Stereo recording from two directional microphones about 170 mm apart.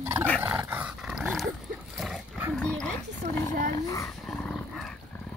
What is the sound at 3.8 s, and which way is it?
Dog, 20° left (ahead or behind).